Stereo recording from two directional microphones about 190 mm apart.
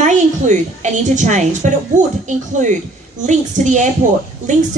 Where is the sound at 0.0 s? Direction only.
40° right (ahead or behind).